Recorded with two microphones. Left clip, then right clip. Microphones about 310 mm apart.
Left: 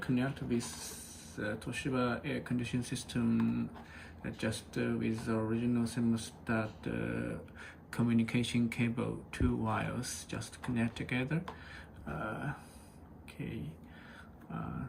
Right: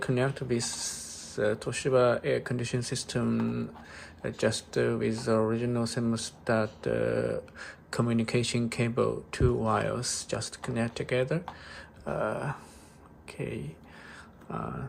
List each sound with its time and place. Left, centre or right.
0.0 s speech: centre